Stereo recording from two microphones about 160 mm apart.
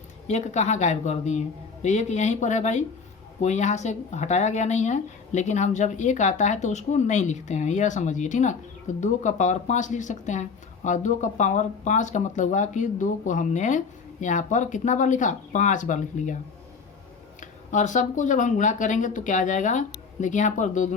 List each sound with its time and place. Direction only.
0.3 s speech: 45° left (ahead or behind)
17.4 s speech: 50° left (ahead or behind)